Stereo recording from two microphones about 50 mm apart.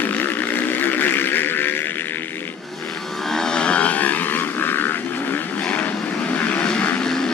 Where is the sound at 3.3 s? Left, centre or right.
Centre; by 5.0 s left.